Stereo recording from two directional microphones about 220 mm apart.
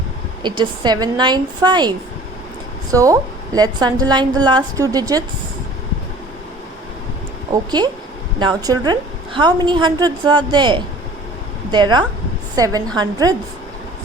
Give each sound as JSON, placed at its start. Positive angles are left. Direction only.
{"t": 0.4, "sound": "a woman's voice", "side_deg": -20}
{"t": 7.5, "sound": "a woman's voice", "side_deg": -20}